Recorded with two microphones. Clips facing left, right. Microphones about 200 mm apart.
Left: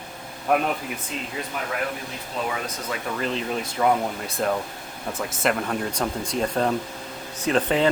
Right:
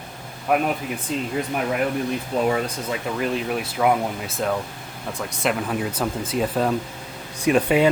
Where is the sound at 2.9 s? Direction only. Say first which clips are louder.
Even; 10° right (ahead or behind).